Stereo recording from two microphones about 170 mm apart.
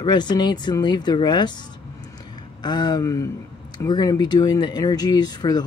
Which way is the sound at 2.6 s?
25° left (ahead or behind).